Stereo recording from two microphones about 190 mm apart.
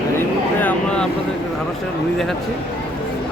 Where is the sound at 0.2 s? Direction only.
10° left (ahead or behind).